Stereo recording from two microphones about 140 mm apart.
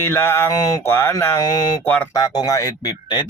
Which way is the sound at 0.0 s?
15° left (ahead or behind).